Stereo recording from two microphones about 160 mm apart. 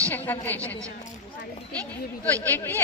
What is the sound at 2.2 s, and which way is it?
Speech, 10° left (ahead or behind).